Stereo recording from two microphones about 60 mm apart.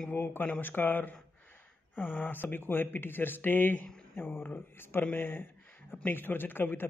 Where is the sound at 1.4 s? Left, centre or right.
Left.